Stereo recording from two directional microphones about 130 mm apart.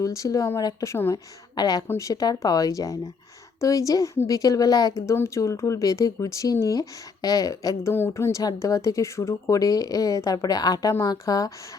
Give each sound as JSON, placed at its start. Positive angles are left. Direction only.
{"t": 0.0, "sound": "speech", "side_deg": 25}